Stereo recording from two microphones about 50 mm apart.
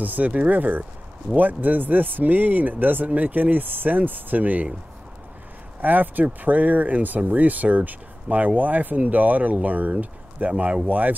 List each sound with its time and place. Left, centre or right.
0.0 s speech: right
5.8 s speech: right